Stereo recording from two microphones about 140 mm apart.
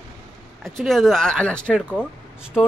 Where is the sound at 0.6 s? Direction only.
Centre (ahead or behind).